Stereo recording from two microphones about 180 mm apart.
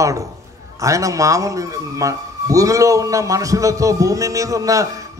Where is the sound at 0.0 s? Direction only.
20° right (ahead or behind).